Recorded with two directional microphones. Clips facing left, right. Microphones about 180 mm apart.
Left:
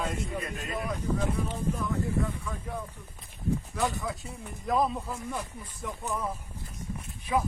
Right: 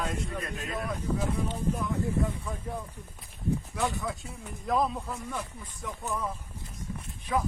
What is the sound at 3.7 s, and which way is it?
A man's voice, centre (ahead or behind).